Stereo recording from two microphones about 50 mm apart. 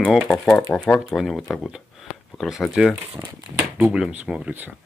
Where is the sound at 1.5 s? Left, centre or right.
Centre.